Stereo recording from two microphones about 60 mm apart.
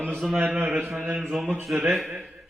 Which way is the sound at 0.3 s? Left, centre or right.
Right.